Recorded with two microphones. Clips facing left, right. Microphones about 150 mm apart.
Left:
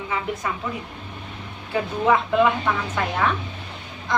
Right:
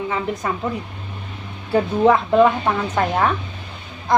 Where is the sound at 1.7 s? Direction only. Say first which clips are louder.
Right 5 dB; 40° right (ahead or behind).